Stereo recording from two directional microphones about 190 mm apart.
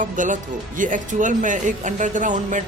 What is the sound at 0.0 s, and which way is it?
Speech, 40° right (ahead or behind).